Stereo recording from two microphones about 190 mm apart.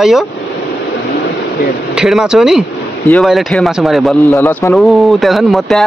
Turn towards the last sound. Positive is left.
turn(degrees=0)  # may be behind; listen again after turning